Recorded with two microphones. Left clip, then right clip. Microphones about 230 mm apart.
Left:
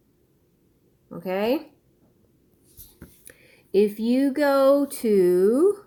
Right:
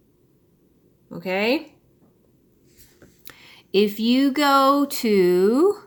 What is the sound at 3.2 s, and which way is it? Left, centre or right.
Speech, right.